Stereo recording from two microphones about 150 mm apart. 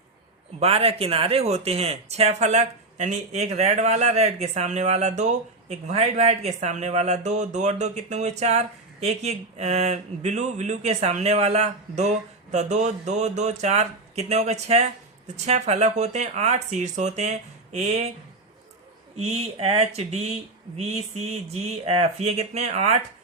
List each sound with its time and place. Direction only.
0.6 s speech: 40° right (ahead or behind)
19.1 s speech: 45° right (ahead or behind)